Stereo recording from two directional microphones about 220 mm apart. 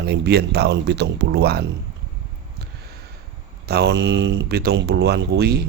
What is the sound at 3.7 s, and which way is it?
Speech, 50° right (ahead or behind).